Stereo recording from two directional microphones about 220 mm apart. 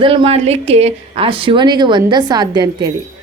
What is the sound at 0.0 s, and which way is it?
A woman's voice, 25° right (ahead or behind).